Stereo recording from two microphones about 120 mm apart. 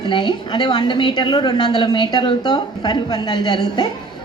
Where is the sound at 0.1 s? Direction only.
40° left (ahead or behind).